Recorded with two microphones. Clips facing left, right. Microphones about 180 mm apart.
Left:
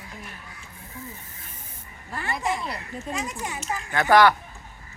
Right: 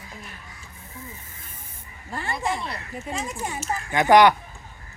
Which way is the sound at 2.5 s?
10° left (ahead or behind).